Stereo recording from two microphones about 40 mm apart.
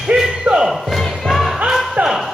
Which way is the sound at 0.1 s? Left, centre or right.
Centre.